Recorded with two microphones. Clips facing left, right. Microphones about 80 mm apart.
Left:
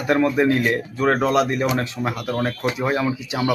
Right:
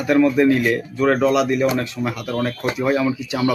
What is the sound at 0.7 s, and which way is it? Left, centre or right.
Speech, left.